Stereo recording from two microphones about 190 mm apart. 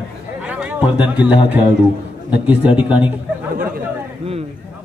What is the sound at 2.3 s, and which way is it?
Speech, 5° right (ahead or behind).